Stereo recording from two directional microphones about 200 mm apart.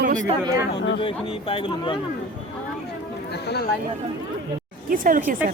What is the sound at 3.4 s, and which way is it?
Speech, 55° left (ahead or behind).